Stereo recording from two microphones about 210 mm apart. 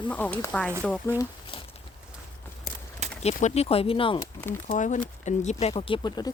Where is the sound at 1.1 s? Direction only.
10° right (ahead or behind).